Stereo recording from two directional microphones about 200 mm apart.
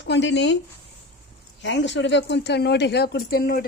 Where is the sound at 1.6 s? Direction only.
65° left (ahead or behind).